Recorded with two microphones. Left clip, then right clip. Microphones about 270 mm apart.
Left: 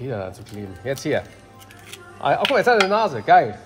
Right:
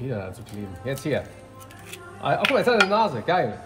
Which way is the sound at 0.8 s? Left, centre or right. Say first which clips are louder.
Left 4 dB; left.